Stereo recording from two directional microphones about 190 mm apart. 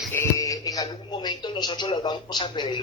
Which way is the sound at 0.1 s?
15° left (ahead or behind).